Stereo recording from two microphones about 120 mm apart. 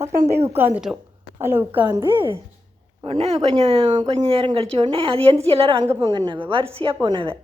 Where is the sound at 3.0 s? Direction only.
55° right (ahead or behind).